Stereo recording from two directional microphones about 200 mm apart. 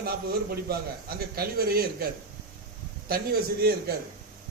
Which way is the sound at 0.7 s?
50° right (ahead or behind).